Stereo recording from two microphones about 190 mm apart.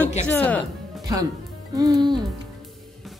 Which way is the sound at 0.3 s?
10° left (ahead or behind).